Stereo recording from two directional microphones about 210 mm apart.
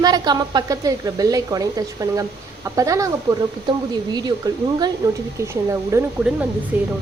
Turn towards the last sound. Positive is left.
turn(degrees=-10)  # may be behind; listen again after turning